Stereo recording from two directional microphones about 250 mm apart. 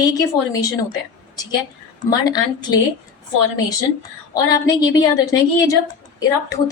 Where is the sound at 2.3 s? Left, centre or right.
Centre.